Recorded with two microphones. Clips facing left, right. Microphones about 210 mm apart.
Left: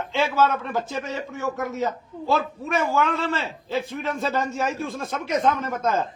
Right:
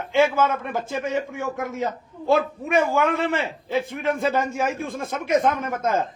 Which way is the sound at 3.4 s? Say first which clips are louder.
Right 2 dB; 55° right (ahead or behind).